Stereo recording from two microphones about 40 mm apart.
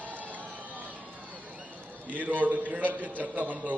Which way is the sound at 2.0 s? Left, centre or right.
Right.